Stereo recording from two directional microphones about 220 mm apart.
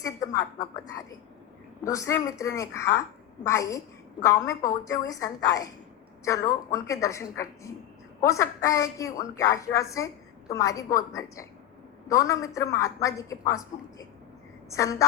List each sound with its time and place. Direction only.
0.0 s a woman's voice: 15° left (ahead or behind)
14.7 s a woman's voice: 15° left (ahead or behind)